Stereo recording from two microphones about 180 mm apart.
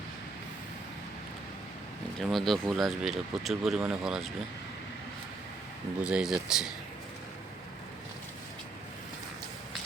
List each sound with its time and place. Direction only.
2.3 s speech: centre (ahead or behind)
6.0 s speech: 5° right (ahead or behind)